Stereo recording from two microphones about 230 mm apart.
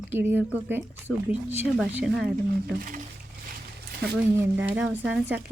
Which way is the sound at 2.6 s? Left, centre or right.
Right.